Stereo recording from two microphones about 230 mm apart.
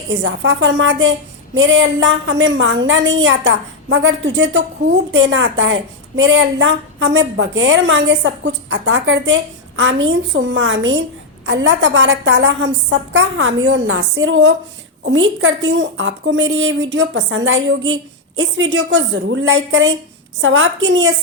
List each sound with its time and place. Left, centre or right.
0.1 s a woman's voice: right